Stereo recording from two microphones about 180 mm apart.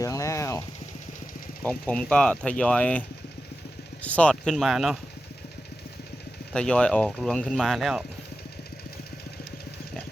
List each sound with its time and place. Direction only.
0.0 s a sound: 15° left (ahead or behind)
1.6 s speech: 5° left (ahead or behind)
4.0 s speech: 5° left (ahead or behind)
6.5 s speech: 5° left (ahead or behind)